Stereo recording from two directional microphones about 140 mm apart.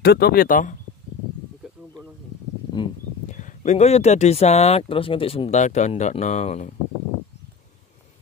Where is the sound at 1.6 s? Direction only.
5° right (ahead or behind).